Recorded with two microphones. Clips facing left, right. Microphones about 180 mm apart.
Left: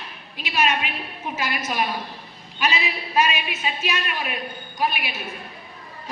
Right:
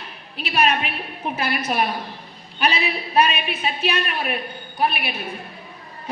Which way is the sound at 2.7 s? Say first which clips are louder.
Right 3 dB; 35° right (ahead or behind).